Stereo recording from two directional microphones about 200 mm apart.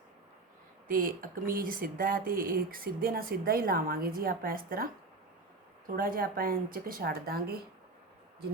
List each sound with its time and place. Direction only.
0.9 s speech: 45° right (ahead or behind)
6.0 s speech: 45° right (ahead or behind)